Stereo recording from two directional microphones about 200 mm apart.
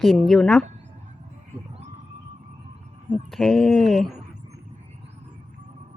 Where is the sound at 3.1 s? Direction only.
Centre (ahead or behind).